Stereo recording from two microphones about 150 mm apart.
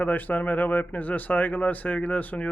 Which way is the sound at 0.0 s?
10° left (ahead or behind).